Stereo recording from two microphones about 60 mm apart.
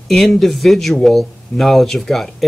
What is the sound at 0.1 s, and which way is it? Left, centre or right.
Speech, centre.